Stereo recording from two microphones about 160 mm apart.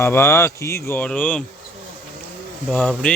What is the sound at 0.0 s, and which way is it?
Speech, 15° left (ahead or behind).